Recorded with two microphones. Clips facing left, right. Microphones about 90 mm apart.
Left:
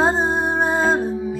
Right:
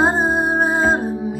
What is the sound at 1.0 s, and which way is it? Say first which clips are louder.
Music: even; 45° right (ahead or behind).